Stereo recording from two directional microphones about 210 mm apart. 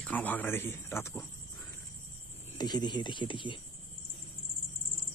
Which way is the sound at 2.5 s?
20° left (ahead or behind).